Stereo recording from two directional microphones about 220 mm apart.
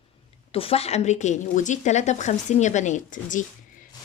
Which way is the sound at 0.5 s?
25° left (ahead or behind).